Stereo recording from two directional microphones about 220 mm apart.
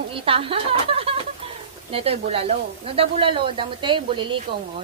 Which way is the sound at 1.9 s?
25° right (ahead or behind).